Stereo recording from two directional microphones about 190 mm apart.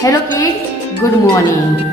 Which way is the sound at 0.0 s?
20° left (ahead or behind).